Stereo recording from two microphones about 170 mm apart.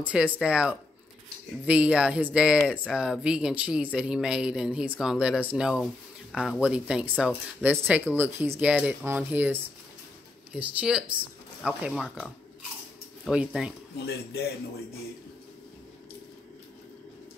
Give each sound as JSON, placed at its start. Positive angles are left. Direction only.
{"t": 0.0, "sound": "speech", "side_deg": -5}
{"t": 13.9, "sound": "speech", "side_deg": 70}